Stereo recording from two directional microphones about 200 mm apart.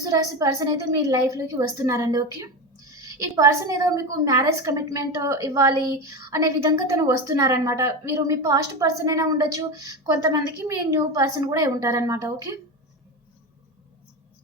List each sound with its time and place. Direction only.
0.0 s a woman's voice: 15° right (ahead or behind)